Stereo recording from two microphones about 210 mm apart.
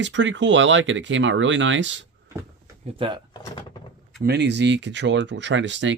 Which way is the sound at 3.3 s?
20° left (ahead or behind).